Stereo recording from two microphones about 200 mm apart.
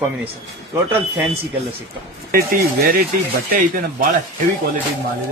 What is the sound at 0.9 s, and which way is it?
Speech, 10° right (ahead or behind).